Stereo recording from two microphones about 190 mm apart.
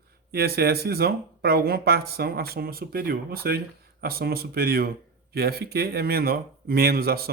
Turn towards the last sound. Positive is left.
turn(degrees=-55)  # may be behind; listen again after turning